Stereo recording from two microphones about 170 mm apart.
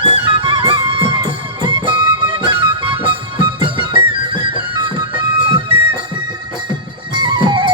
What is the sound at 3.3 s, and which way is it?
Music, 30° right (ahead or behind).